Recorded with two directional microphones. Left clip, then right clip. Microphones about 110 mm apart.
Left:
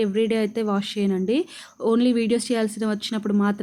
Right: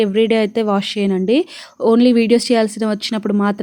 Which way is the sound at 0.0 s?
45° right (ahead or behind).